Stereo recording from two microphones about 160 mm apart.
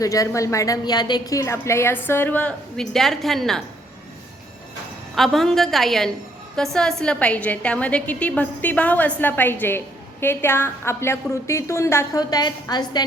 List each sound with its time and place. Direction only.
0.0 s a woman's voice: 20° left (ahead or behind); by 3.6 s centre (ahead or behind)
5.1 s a woman's voice: centre (ahead or behind); by 13.1 s 25° left (ahead or behind)